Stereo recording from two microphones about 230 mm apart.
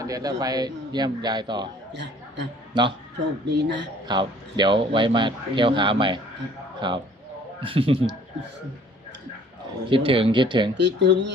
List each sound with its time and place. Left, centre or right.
0.0 s speech: centre
1.9 s a sound: right
2.8 s speech: centre
3.4 s speech: right
4.1 s speech: centre
9.9 s speech: right
10.8 s speech: right